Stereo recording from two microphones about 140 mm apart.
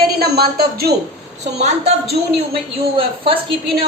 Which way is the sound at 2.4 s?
40° right (ahead or behind).